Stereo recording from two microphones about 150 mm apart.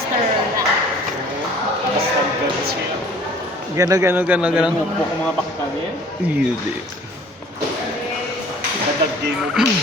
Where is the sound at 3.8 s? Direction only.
20° right (ahead or behind).